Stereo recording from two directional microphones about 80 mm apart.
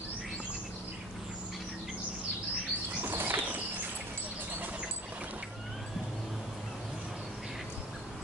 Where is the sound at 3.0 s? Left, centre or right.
Right.